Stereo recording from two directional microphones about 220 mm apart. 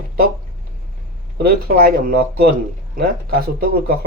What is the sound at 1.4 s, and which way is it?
Speech, 45° right (ahead or behind).